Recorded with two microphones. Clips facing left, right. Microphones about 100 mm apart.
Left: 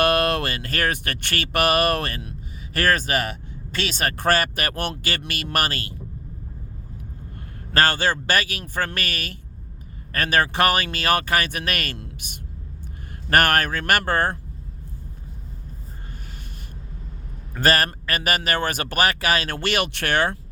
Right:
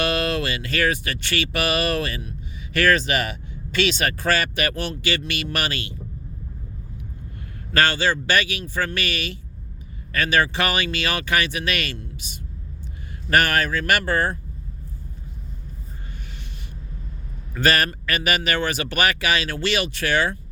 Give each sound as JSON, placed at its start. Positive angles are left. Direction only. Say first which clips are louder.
{"t": 0.0, "sound": "speech", "louder": "left 3 dB", "side_deg": 55}
{"t": 7.7, "sound": "speech", "louder": "even", "side_deg": 40}
{"t": 11.9, "sound": "a man's voice", "louder": "right 1 dB", "side_deg": 60}
{"t": 17.5, "sound": "speech", "louder": "even", "side_deg": 40}